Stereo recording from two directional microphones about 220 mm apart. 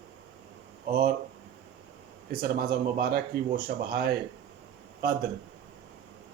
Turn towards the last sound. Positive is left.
turn(degrees=-45)  # may be behind; listen again after turning